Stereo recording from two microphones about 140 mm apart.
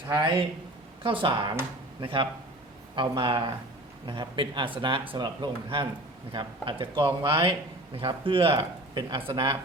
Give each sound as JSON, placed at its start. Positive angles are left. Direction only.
{"t": 1.0, "sound": "speech", "side_deg": -35}